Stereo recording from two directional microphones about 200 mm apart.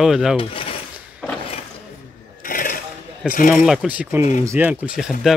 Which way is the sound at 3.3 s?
45° left (ahead or behind).